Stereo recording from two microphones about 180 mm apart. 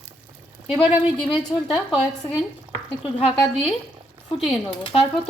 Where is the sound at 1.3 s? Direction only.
Centre (ahead or behind).